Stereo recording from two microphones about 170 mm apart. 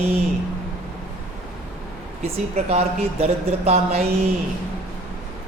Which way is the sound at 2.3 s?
40° right (ahead or behind).